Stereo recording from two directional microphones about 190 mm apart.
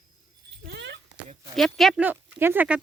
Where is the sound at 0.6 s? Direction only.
60° right (ahead or behind).